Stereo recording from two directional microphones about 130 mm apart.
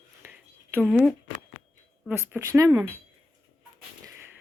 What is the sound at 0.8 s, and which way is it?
Speech, centre (ahead or behind).